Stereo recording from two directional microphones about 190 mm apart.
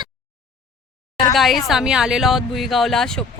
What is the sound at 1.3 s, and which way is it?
Speech, centre (ahead or behind).